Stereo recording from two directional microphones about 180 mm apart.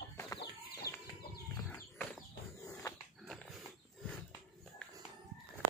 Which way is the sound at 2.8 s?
20° left (ahead or behind).